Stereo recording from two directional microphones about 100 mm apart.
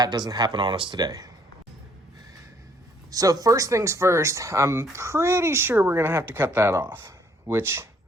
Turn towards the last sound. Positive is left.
turn(degrees=-25)  # may be behind; listen again after turning